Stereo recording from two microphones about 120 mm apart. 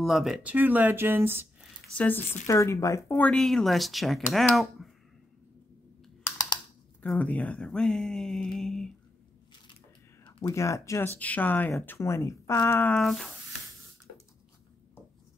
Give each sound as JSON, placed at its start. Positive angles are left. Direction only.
{"t": 0.0, "sound": "speech", "side_deg": 0}
{"t": 2.4, "sound": "speech", "side_deg": 25}
{"t": 3.2, "sound": "speech", "side_deg": 5}
{"t": 7.0, "sound": "speech", "side_deg": 10}
{"t": 10.5, "sound": "speech", "side_deg": 25}
{"t": 11.1, "sound": "speech", "side_deg": 10}
{"t": 13.0, "sound": "speech", "side_deg": 0}